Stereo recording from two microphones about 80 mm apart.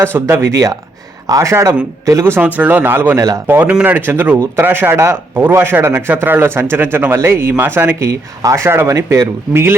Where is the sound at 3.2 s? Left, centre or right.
Right.